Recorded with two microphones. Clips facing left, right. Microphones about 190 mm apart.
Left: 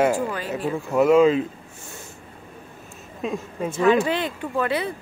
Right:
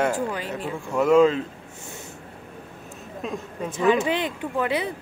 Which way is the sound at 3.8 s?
15° right (ahead or behind).